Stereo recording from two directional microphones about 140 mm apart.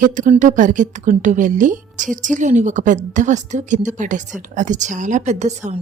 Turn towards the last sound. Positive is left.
turn(degrees=-55)  # may be behind; listen again after turning